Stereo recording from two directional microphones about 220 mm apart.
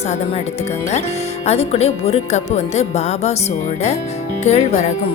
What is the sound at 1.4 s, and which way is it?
Speech, 30° left (ahead or behind).